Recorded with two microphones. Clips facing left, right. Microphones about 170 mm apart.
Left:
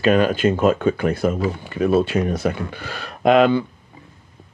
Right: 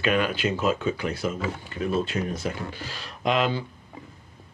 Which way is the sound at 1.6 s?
75° left (ahead or behind).